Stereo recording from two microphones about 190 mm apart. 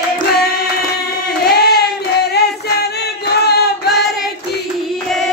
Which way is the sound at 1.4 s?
55° left (ahead or behind).